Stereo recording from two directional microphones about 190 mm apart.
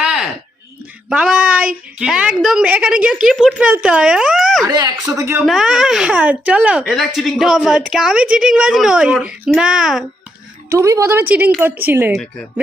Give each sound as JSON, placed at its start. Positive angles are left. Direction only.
{"t": 0.0, "sound": "a sound", "side_deg": -5}
{"t": 1.1, "sound": "speech", "side_deg": -5}
{"t": 4.6, "sound": "speech", "side_deg": -20}
{"t": 5.5, "sound": "speech", "side_deg": 0}
{"t": 10.7, "sound": "speech", "side_deg": -15}